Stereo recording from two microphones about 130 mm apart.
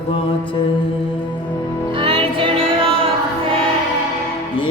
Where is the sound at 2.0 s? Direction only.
45° right (ahead or behind).